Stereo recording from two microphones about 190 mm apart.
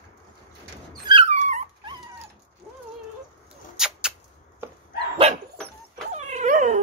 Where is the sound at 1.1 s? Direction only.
35° right (ahead or behind).